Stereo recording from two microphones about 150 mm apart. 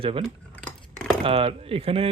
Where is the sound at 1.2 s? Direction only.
40° right (ahead or behind).